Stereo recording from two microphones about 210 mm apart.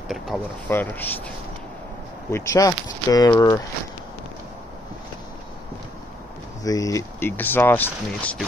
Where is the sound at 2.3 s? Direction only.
15° left (ahead or behind).